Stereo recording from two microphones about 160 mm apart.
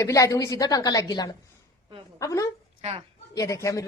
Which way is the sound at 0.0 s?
20° left (ahead or behind).